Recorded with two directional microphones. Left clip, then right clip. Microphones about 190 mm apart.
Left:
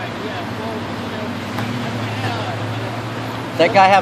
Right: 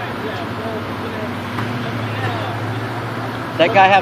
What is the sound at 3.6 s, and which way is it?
Speech, 35° left (ahead or behind).